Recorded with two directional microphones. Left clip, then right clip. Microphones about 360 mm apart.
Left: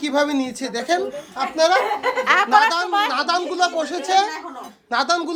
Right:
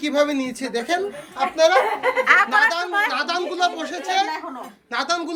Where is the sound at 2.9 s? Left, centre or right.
Centre.